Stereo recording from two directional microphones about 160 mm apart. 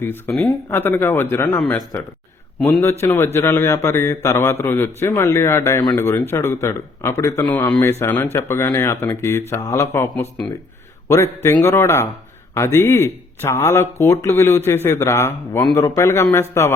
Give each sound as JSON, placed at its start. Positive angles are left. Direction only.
{"t": 0.0, "sound": "speech", "side_deg": 15}
{"t": 3.0, "sound": "speech", "side_deg": 15}